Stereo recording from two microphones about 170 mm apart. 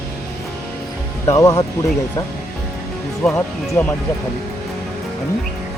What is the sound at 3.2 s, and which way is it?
Speech, 10° left (ahead or behind).